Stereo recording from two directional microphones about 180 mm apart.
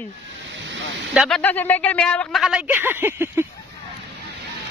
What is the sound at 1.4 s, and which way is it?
Speech, 10° left (ahead or behind).